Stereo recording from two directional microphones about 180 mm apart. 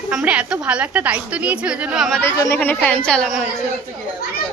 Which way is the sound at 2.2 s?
15° left (ahead or behind).